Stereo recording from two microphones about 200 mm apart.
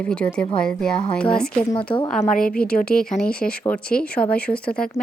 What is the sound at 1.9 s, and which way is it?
Speech, 25° left (ahead or behind).